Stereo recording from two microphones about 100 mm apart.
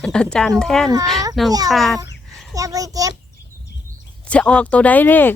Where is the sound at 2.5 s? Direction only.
35° right (ahead or behind).